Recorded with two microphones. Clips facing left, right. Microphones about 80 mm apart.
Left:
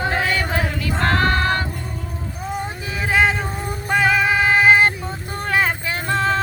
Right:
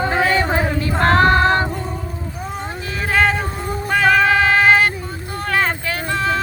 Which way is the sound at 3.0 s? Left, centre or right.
Centre.